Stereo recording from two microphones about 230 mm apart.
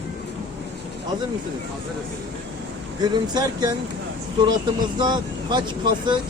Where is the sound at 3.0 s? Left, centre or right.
Centre.